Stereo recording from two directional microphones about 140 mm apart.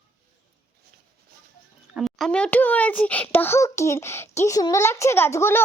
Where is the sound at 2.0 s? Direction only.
Centre (ahead or behind).